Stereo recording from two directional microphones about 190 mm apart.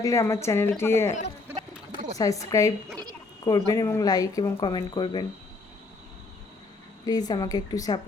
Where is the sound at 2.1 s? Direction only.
15° left (ahead or behind).